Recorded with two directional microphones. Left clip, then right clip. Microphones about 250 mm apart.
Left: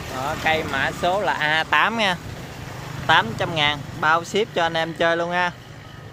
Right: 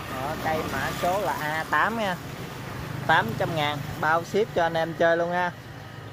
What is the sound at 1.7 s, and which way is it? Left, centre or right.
Speech, centre.